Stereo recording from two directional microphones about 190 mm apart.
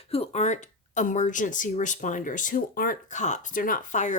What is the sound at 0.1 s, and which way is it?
Speech, 35° left (ahead or behind).